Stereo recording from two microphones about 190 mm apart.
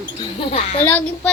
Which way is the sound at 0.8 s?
10° left (ahead or behind).